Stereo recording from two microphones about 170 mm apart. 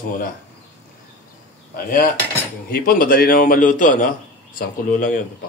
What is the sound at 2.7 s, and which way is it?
A man's voice, 60° left (ahead or behind).